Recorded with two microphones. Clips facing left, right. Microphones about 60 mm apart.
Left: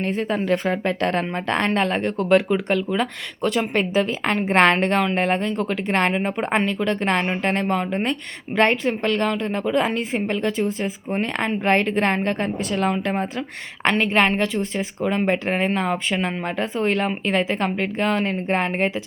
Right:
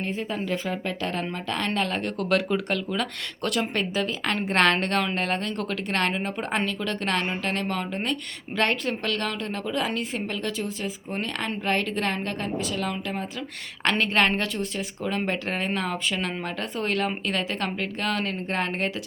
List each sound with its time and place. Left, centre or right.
0.0 s a woman's voice: left
14.0 s a woman's voice: centre
14.6 s a woman's voice: left